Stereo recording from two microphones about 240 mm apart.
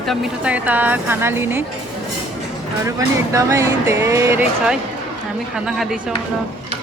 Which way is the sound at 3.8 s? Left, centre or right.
Centre.